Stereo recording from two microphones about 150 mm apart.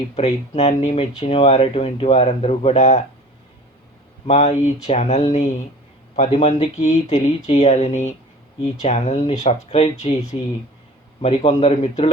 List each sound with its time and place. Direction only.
0.2 s speech: 45° left (ahead or behind)
4.3 s speech: 50° left (ahead or behind)
11.2 s speech: 45° left (ahead or behind)